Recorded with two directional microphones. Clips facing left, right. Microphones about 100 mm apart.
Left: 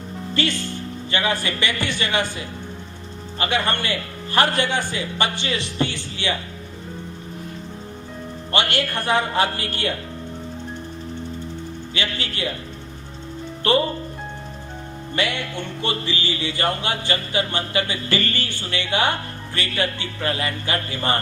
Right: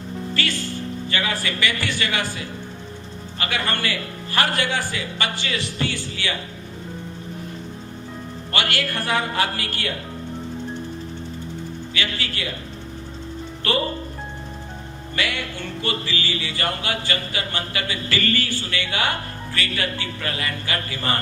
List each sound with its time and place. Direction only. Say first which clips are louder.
0.4 s music: left 4 dB; 20° left (ahead or behind)
8.5 s music: left 2 dB; 20° left (ahead or behind)
11.9 s music: left 1 dB; 25° left (ahead or behind)
13.6 s music: left 5 dB; 25° left (ahead or behind)
15.1 s music: left 2 dB; 25° left (ahead or behind)